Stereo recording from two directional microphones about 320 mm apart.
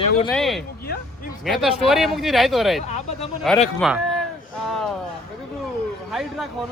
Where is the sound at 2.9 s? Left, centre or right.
Left.